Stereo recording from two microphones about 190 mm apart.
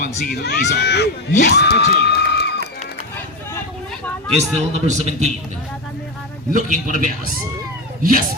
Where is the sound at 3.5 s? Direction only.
10° left (ahead or behind).